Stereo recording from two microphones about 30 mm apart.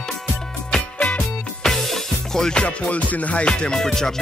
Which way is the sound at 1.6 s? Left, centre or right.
Centre.